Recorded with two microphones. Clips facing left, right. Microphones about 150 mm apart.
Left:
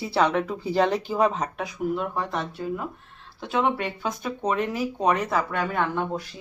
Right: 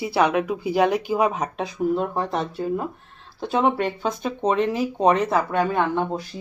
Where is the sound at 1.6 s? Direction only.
30° right (ahead or behind).